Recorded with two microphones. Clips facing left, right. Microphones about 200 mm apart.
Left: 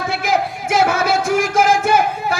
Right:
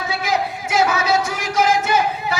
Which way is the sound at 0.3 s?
50° left (ahead or behind).